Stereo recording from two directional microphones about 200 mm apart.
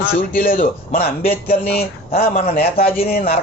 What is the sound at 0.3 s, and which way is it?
Speech, 45° left (ahead or behind).